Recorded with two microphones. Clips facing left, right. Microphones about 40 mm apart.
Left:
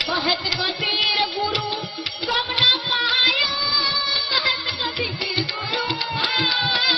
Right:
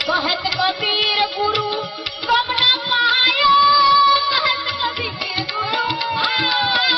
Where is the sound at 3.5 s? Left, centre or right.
Right.